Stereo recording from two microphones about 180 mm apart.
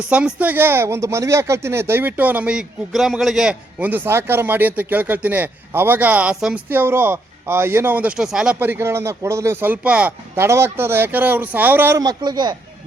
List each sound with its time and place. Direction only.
0.1 s a woman's voice: 5° right (ahead or behind); by 12.5 s 25° right (ahead or behind)